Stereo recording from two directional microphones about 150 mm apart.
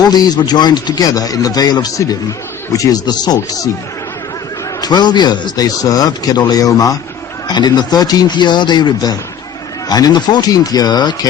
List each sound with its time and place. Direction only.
0.1 s speech: 30° left (ahead or behind)
4.8 s speech: 30° left (ahead or behind)